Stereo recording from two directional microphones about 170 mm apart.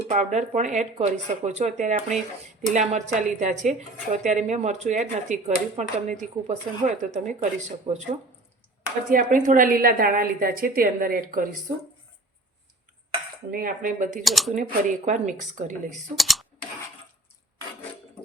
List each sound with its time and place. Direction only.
0.1 s speech: 45° right (ahead or behind)
9.3 s a woman's voice: 50° right (ahead or behind)
13.5 s speech: 60° right (ahead or behind)
14.3 s speech: centre (ahead or behind)
14.5 s speech: 50° right (ahead or behind)
16.1 s computer keyboard: centre (ahead or behind)